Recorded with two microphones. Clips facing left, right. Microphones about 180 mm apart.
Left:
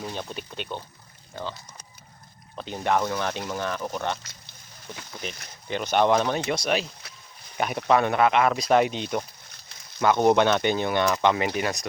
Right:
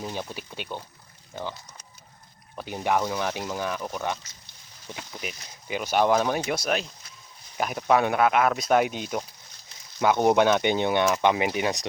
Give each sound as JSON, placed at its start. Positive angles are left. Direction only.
{"t": 0.0, "sound": "speech", "side_deg": -10}
{"t": 2.6, "sound": "speech", "side_deg": -10}
{"t": 5.2, "sound": "speech", "side_deg": -10}
{"t": 7.0, "sound": "a sound", "side_deg": 70}
{"t": 7.5, "sound": "speech", "side_deg": 0}